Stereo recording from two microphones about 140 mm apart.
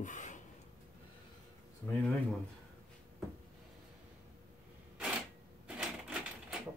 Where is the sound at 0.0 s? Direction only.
65° left (ahead or behind).